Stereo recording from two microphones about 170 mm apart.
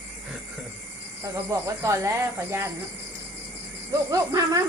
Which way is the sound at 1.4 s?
15° right (ahead or behind).